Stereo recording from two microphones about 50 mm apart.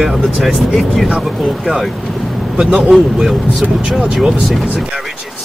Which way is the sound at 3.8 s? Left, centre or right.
Centre.